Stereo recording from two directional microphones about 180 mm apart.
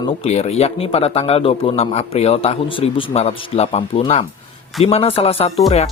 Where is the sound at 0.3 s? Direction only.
35° left (ahead or behind).